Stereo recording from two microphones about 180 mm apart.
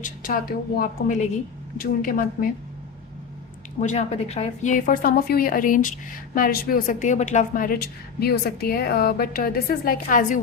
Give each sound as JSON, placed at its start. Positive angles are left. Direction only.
{"t": 0.0, "sound": "a woman's voice", "side_deg": 50}
{"t": 3.8, "sound": "a woman's voice", "side_deg": 40}